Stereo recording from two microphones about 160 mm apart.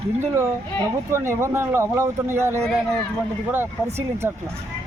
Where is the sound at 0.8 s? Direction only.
15° right (ahead or behind).